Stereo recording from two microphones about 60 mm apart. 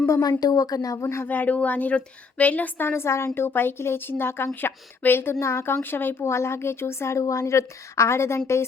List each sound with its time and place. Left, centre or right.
0.1 s speech: left
1.2 s a woman's voice: left
6.2 s a woman's voice: left